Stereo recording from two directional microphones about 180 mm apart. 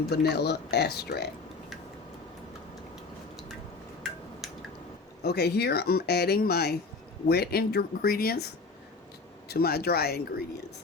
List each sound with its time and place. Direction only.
0.1 s speech: 65° left (ahead or behind)
5.2 s speech: 65° left (ahead or behind)